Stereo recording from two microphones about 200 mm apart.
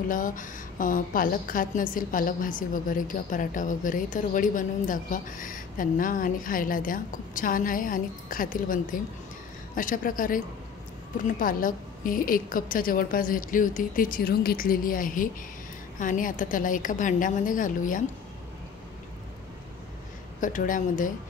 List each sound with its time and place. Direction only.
0.1 s a woman's voice: 40° left (ahead or behind)
20.3 s a woman's voice: 40° left (ahead or behind)